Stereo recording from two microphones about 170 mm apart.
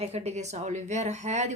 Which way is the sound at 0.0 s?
40° right (ahead or behind).